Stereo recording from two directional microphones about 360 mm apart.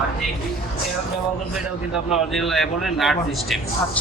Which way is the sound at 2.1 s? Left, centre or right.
Centre.